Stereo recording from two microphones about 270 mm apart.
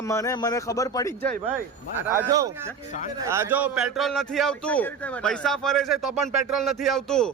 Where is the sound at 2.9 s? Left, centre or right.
Left.